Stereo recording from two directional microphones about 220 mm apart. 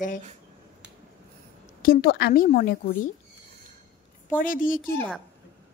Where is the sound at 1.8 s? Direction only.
40° left (ahead or behind).